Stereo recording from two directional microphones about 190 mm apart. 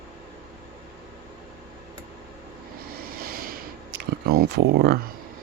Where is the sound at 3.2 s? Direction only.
50° right (ahead or behind).